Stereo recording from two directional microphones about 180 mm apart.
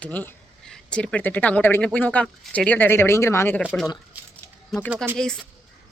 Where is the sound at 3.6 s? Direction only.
Centre (ahead or behind).